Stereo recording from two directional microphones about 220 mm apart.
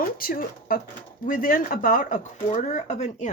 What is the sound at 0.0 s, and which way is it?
Speech, 40° left (ahead or behind).